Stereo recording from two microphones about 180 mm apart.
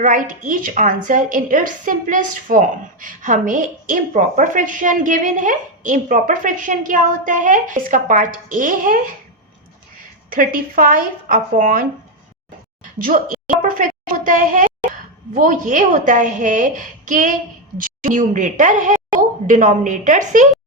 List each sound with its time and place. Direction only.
0.0 s a woman's voice: 45° right (ahead or behind)
10.2 s a woman's voice: 50° right (ahead or behind)
13.0 s a sound: 50° right (ahead or behind)
15.3 s a woman's voice: 45° right (ahead or behind)